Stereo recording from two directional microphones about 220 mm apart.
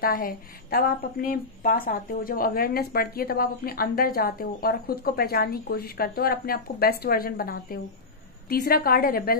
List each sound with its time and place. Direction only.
0.0 s a woman's voice: 40° left (ahead or behind)